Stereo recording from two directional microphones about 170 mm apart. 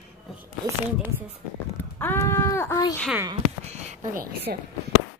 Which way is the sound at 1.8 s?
10° left (ahead or behind).